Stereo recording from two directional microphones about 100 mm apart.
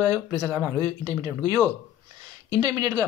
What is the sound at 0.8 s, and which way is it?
Speech, 40° right (ahead or behind).